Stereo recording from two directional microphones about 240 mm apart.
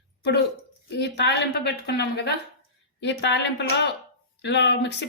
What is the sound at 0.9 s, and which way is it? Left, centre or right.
Speech, left.